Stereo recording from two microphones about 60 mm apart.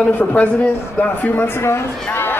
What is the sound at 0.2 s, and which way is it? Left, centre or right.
Speech, left.